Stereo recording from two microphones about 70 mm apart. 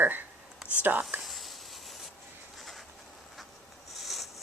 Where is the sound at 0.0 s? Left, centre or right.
Right.